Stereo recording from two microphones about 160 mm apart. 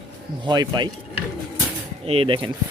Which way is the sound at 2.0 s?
35° right (ahead or behind).